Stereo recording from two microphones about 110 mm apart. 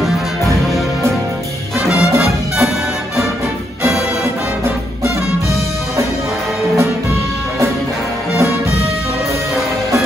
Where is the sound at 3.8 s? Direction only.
Centre (ahead or behind).